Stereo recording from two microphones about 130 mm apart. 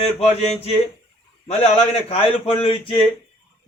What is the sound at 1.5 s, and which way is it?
A man's voice, 50° left (ahead or behind).